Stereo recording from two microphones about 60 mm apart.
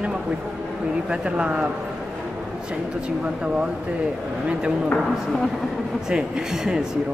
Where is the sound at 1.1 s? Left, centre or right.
Centre.